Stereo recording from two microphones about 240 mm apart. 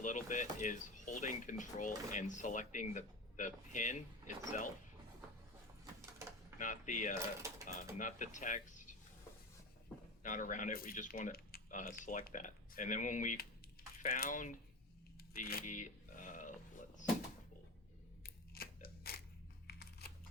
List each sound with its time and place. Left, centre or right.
0.0 s speech: left
6.6 s speech: left
7.2 s speech: centre
7.9 s speech: left
10.2 s speech: left
15.3 s a sound: left
18.2 s scissors: left
19.6 s a sound: left